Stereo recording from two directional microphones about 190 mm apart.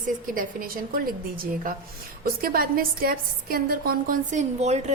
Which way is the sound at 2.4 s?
50° right (ahead or behind).